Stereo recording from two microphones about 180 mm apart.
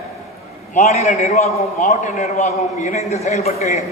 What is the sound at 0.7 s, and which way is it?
A man's voice, 40° left (ahead or behind).